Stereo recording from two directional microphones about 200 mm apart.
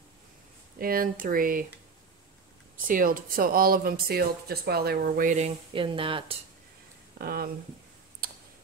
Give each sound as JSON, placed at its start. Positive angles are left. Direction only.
{"t": 0.7, "sound": "speech", "side_deg": -45}
{"t": 2.9, "sound": "speech", "side_deg": -45}
{"t": 5.7, "sound": "speech", "side_deg": -25}
{"t": 7.2, "sound": "speech", "side_deg": -50}
{"t": 8.2, "sound": "clicking", "side_deg": -50}